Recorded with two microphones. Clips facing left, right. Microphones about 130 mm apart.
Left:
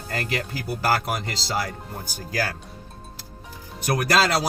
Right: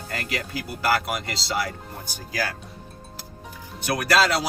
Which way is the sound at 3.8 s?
40° left (ahead or behind).